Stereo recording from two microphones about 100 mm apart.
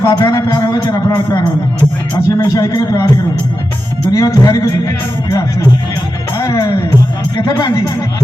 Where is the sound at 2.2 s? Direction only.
35° left (ahead or behind).